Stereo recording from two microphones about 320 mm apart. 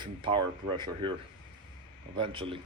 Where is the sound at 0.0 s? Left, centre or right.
Centre.